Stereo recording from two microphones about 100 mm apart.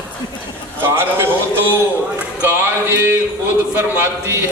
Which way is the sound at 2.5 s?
20° right (ahead or behind).